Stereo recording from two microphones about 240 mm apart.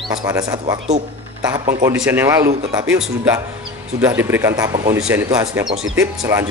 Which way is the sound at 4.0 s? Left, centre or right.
Centre.